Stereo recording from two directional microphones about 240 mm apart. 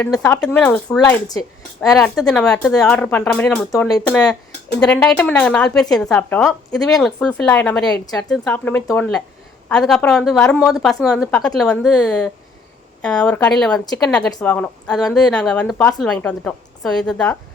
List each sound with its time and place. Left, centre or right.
0.0 s speech: centre
0.9 s speech: centre
2.3 s a woman's voice: centre
14.3 s a woman's voice: centre